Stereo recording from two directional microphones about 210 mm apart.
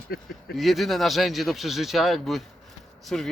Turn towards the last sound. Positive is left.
turn(degrees=0)  # may be behind; listen again after turning